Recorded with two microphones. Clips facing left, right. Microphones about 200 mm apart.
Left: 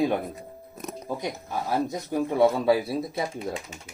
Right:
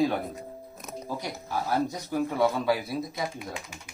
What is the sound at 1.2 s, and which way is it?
Speech, 20° left (ahead or behind).